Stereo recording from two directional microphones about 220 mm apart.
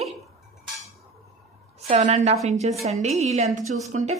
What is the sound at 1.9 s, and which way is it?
A woman's voice, 30° right (ahead or behind).